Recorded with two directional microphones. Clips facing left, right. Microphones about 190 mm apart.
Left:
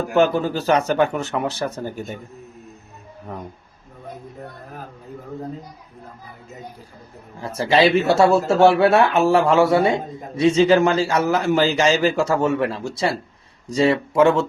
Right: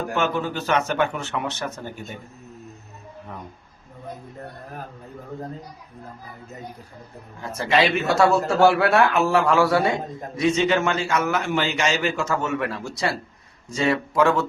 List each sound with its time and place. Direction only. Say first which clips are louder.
0.2 s speech: left 8 dB; 35° left (ahead or behind)
7.5 s a man's voice: left 5 dB; 35° left (ahead or behind)